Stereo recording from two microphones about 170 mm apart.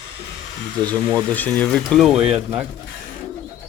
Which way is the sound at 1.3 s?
10° left (ahead or behind).